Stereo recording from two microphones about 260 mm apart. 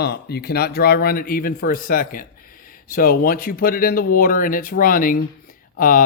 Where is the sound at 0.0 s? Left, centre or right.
Left.